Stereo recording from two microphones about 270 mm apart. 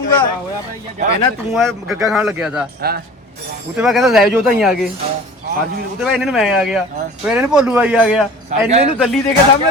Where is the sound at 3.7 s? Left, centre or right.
Centre.